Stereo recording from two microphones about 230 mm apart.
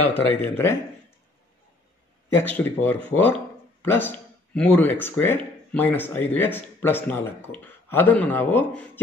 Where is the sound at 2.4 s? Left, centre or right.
Centre.